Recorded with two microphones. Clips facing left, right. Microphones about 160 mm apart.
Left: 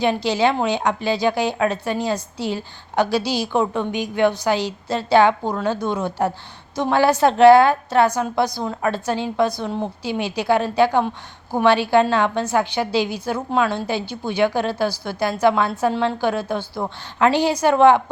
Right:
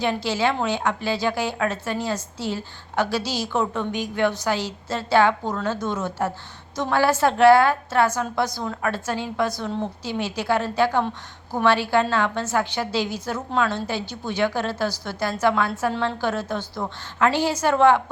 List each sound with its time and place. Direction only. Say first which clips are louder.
0.0 s a woman's voice: left 4 dB; 15° left (ahead or behind)